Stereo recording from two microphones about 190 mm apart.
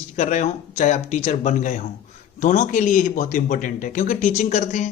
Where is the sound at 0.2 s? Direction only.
40° left (ahead or behind).